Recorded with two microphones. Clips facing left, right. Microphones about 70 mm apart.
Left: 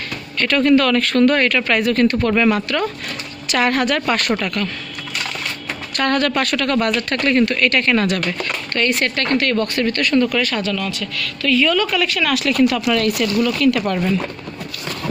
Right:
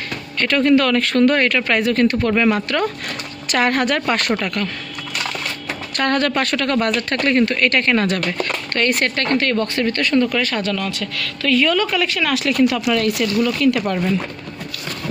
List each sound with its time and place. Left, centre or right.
0.4 s speech: centre
3.5 s a woman's voice: right
5.9 s speech: right
8.7 s speech: right
9.0 s speech: right
10.6 s speech: right
10.9 s speech: right
11.6 s speech: right